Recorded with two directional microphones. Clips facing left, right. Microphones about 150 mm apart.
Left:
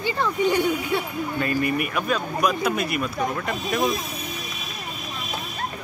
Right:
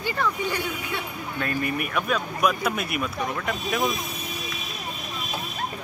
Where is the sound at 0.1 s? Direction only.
20° left (ahead or behind).